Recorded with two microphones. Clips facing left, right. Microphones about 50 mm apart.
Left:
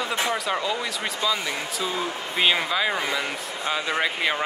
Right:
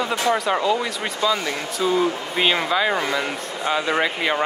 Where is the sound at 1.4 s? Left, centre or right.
Centre.